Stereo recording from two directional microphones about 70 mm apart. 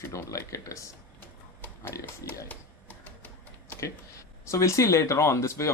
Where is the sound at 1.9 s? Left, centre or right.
Left.